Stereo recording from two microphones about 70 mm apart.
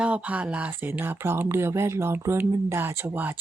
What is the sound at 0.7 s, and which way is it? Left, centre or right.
Speech, right.